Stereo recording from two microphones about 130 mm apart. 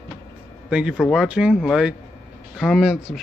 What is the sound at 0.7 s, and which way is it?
Speech, 5° right (ahead or behind).